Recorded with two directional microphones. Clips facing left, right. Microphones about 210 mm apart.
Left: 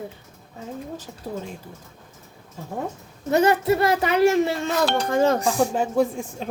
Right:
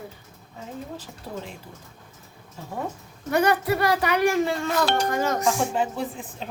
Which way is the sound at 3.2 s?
25° left (ahead or behind).